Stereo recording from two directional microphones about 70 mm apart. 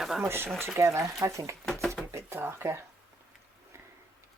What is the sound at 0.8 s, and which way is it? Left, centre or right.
Speech, right.